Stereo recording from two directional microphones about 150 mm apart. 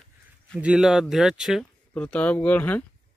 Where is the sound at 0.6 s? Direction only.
5° right (ahead or behind).